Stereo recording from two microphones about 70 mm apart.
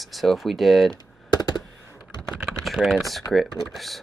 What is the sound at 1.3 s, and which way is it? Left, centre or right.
Computer keyboard, left.